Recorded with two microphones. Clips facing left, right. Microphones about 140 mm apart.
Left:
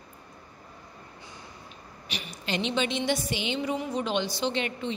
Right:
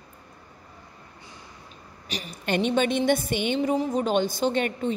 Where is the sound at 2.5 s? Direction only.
50° right (ahead or behind).